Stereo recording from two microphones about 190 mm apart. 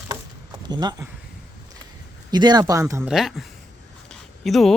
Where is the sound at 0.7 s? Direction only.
20° right (ahead or behind).